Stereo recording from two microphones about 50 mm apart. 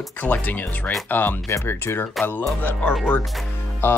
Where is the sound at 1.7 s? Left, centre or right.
Left.